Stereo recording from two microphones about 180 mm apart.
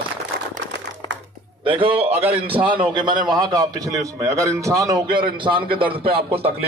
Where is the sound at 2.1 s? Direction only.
10° right (ahead or behind).